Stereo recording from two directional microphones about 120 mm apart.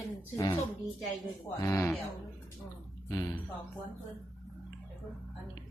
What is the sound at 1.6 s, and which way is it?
Speech, 25° left (ahead or behind).